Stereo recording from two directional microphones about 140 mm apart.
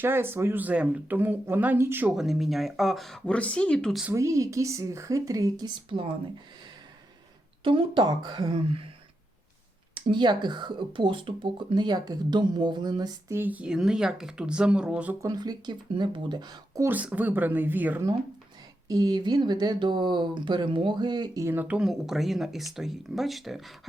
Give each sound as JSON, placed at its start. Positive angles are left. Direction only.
{"t": 0.0, "sound": "speech", "side_deg": -15}
{"t": 2.1, "sound": "speech", "side_deg": 0}
{"t": 4.1, "sound": "speech", "side_deg": -20}
{"t": 7.6, "sound": "speech", "side_deg": -40}
{"t": 9.9, "sound": "speech", "side_deg": -35}
{"t": 15.2, "sound": "speech", "side_deg": -25}
{"t": 16.8, "sound": "speech", "side_deg": -10}
{"t": 18.9, "sound": "speech", "side_deg": -30}
{"t": 21.4, "sound": "speech", "side_deg": -15}
{"t": 21.8, "sound": "speech", "side_deg": -5}